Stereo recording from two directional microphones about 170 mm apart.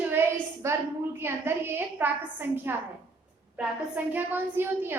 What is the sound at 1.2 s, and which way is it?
A woman's voice, 15° right (ahead or behind).